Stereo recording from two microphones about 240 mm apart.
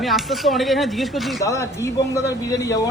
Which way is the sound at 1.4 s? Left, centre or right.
Centre.